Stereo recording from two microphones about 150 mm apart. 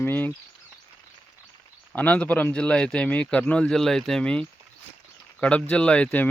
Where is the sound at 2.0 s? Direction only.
10° left (ahead or behind).